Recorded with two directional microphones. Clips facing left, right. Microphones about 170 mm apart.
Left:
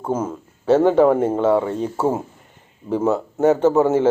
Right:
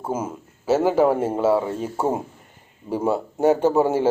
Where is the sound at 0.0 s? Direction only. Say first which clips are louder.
Left 4 dB; 10° right (ahead or behind).